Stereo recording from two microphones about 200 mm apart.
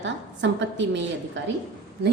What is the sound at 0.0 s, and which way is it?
A woman's voice, 65° right (ahead or behind).